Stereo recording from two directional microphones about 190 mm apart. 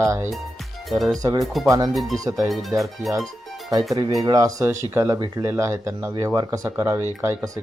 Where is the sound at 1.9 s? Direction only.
Centre (ahead or behind).